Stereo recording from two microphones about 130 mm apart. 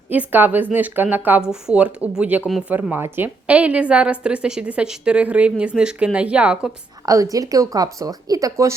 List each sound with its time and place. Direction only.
0.1 s a woman's voice: 15° right (ahead or behind)
7.0 s speech: 25° right (ahead or behind)